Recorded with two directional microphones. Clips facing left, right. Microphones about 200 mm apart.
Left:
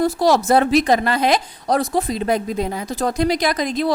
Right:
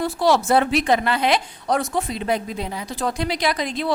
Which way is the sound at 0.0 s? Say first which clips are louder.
Left 3 dB; 40° left (ahead or behind).